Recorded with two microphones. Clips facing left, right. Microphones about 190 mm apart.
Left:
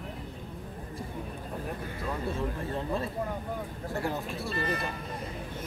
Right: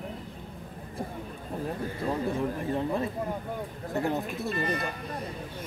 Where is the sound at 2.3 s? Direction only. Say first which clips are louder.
Right 4 dB; 15° right (ahead or behind).